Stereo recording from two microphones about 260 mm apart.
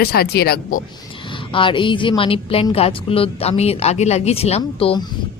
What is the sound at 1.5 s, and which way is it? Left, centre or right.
A woman's voice, centre.